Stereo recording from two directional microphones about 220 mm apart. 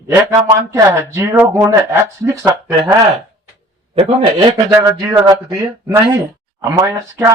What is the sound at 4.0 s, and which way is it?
A man's voice, 25° right (ahead or behind).